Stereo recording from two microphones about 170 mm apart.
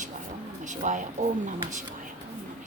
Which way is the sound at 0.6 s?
45° right (ahead or behind).